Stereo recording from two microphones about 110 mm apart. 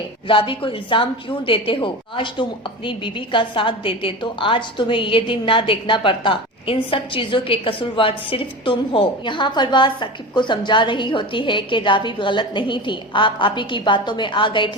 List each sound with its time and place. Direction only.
0.3 s a woman's voice: 50° left (ahead or behind)